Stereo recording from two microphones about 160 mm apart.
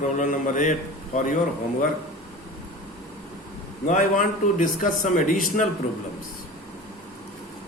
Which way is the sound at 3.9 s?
55° left (ahead or behind).